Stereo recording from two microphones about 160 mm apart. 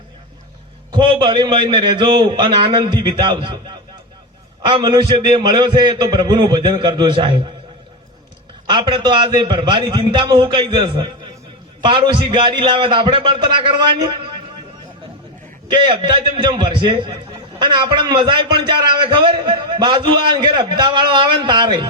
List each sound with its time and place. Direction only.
0.9 s a man's voice: 30° right (ahead or behind)
8.6 s a man's voice: 30° right (ahead or behind)
15.7 s a man's voice: 30° right (ahead or behind)